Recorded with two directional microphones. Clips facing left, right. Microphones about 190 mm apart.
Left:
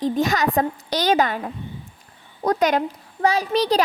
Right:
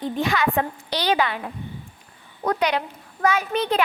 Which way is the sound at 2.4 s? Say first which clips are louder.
Left 3 dB; 40° left (ahead or behind).